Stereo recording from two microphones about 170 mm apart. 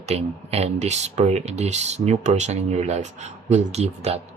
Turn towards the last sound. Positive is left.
turn(degrees=-40)  # may be behind; listen again after turning